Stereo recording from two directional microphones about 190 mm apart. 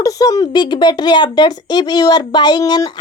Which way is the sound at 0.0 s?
20° left (ahead or behind).